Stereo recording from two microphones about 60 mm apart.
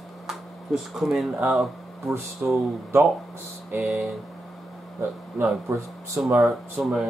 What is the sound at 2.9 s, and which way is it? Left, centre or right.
Speech, right.